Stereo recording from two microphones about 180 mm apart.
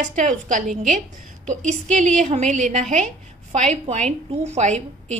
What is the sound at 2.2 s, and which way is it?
A woman's voice, 40° right (ahead or behind).